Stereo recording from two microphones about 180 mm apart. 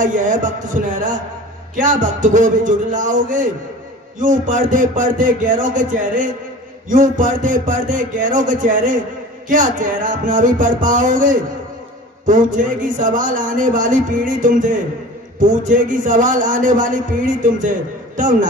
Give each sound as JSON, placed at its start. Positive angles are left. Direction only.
{"t": 0.0, "sound": "a man's voice", "side_deg": -45}